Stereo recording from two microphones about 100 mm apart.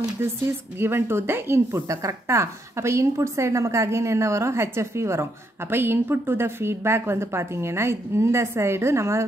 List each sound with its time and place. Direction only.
0.7 s speech: 25° right (ahead or behind)